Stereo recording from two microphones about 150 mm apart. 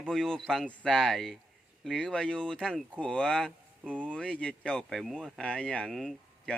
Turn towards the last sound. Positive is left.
turn(degrees=0)  # may be behind; listen again after turning